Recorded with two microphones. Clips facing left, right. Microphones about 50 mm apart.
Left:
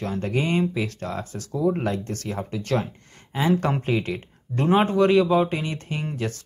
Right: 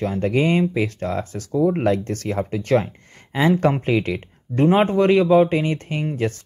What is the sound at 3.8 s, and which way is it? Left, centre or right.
Speech, right.